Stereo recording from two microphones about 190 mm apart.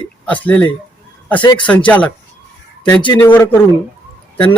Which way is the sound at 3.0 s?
20° left (ahead or behind).